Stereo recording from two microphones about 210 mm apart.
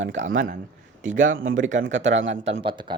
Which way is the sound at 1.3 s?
70° right (ahead or behind).